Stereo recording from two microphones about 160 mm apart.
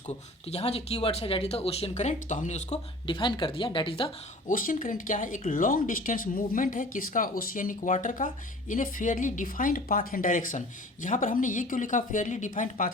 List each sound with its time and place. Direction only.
0.4 s speech: 40° left (ahead or behind)
3.1 s speech: 30° left (ahead or behind)
4.4 s speech: 55° left (ahead or behind)